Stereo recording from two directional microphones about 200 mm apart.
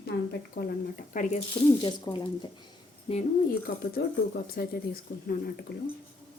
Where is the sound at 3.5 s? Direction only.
50° left (ahead or behind).